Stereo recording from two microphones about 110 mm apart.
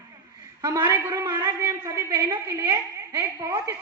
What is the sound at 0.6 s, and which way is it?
Speech, 40° right (ahead or behind).